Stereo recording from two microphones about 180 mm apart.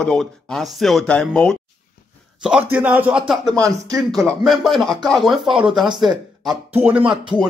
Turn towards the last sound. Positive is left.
turn(degrees=-25)  # may be behind; listen again after turning